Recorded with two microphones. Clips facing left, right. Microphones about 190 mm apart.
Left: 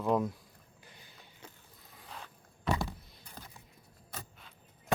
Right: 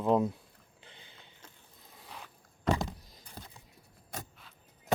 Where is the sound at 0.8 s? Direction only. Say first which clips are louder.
Right 2 dB; 25° right (ahead or behind).